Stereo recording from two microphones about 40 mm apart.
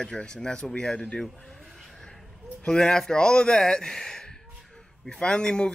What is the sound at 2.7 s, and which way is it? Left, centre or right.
Speech, centre.